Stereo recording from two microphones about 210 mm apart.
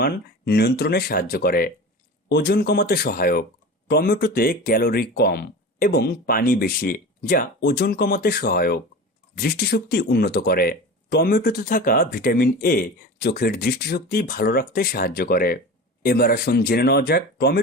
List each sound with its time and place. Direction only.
0.0 s speech: 50° left (ahead or behind)